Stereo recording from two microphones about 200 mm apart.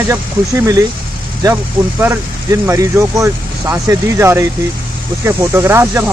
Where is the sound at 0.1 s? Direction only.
15° right (ahead or behind).